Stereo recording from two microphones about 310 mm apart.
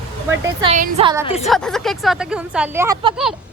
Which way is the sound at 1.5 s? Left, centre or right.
Centre.